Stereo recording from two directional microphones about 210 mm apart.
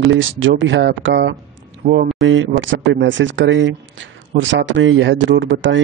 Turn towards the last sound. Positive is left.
turn(degrees=-65)  # may be behind; listen again after turning